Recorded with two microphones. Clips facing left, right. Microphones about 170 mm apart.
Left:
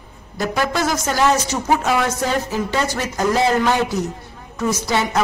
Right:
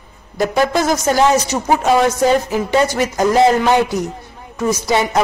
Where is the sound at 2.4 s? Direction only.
15° right (ahead or behind).